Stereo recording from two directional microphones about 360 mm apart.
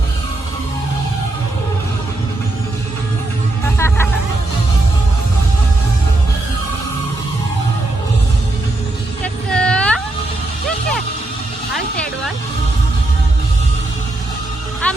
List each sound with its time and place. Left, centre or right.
3.8 s music: centre
9.2 s a sound: centre
14.8 s music: centre